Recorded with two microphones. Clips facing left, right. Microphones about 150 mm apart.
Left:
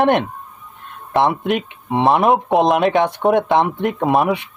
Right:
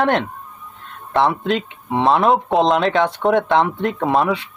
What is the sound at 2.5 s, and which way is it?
Speech, 5° left (ahead or behind).